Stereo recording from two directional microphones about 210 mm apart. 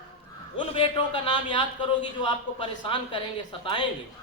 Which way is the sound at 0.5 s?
25° left (ahead or behind).